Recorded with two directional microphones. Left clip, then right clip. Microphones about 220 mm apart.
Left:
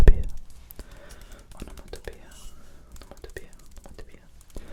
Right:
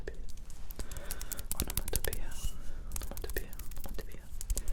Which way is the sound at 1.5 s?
35° right (ahead or behind).